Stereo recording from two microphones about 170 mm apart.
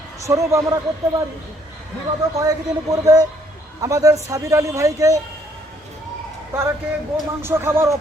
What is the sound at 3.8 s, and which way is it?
A man's voice, 20° right (ahead or behind).